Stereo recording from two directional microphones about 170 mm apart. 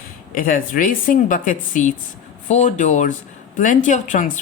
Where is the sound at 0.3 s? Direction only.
55° left (ahead or behind).